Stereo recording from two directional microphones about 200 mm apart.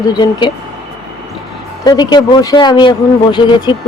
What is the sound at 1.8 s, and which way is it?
Speech, 20° left (ahead or behind).